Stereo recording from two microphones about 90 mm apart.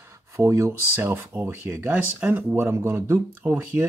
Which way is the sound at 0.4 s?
30° right (ahead or behind).